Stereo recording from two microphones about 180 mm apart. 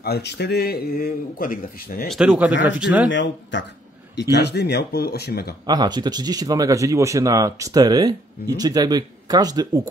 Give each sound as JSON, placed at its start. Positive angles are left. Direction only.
{"t": 0.0, "sound": "speech", "side_deg": 65}
{"t": 2.0, "sound": "speech", "side_deg": -5}
{"t": 3.1, "sound": "speech", "side_deg": 90}
{"t": 4.1, "sound": "speech", "side_deg": 70}
{"t": 5.7, "sound": "speech", "side_deg": -25}